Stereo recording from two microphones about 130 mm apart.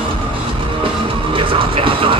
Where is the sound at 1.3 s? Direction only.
40° right (ahead or behind).